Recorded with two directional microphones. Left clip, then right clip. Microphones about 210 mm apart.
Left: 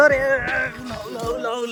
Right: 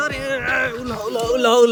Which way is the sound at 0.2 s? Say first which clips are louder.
Even; centre (ahead or behind).